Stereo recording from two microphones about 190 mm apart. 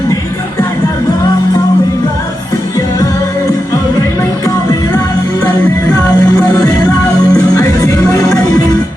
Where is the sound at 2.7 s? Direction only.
15° left (ahead or behind).